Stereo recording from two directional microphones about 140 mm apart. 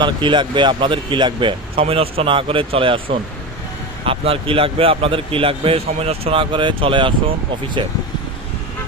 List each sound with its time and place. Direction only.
0.0 s a man's voice: 35° right (ahead or behind)